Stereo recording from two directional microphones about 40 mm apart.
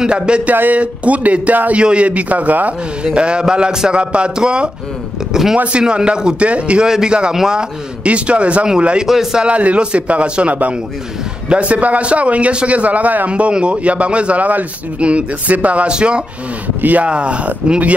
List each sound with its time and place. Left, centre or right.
0.0 s speech: right
0.5 s a man's voice: right
3.2 s a man's voice: right
8.0 s a man's voice: right
9.0 s a man's voice: centre
9.4 s a man's voice: right
13.3 s a man's voice: right
15.9 s speech: right
16.8 s a man's voice: right
17.1 s a man's voice: right